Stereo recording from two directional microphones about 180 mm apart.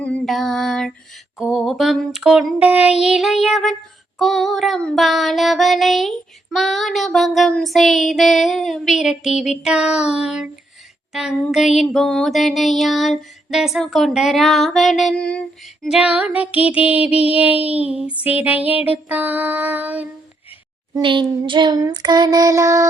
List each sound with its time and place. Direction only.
0.0 s music: 5° left (ahead or behind)
1.4 s a sound: centre (ahead or behind)
16.6 s child singing: 10° right (ahead or behind)
17.9 s a sound: 5° right (ahead or behind)
18.2 s female singing: 35° left (ahead or behind)
18.4 s child singing: 10° right (ahead or behind)
20.9 s child singing: 25° right (ahead or behind)